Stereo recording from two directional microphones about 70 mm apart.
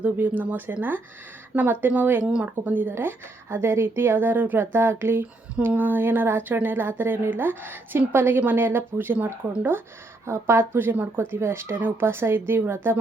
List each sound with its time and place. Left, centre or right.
0.0 s speech: right
9.1 s speech: centre
10.2 s speech: right